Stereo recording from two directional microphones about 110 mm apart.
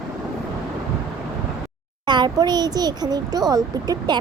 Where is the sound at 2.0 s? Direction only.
40° right (ahead or behind).